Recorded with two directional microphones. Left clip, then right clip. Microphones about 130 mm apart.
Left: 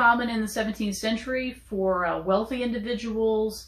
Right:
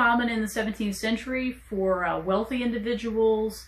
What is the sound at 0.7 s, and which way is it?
Speech, 10° right (ahead or behind).